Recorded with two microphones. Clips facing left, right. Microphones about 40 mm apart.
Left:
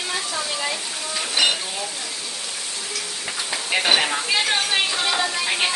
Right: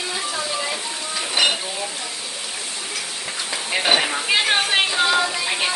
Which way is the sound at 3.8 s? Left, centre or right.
Centre.